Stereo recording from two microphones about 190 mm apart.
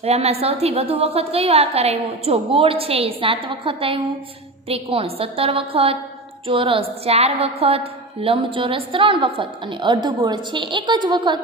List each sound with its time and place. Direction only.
0.0 s a woman's voice: 35° right (ahead or behind)